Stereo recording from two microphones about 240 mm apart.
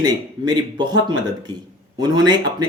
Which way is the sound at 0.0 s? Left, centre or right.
Centre.